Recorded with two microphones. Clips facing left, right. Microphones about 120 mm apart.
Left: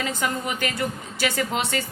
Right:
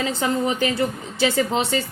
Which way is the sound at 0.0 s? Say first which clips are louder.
Right 5 dB; 30° right (ahead or behind).